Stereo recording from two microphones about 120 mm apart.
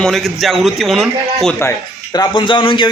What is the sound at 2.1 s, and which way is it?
Speech, 40° left (ahead or behind).